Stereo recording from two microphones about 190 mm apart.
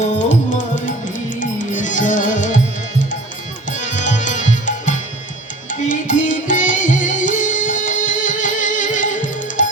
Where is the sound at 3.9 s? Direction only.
40° left (ahead or behind).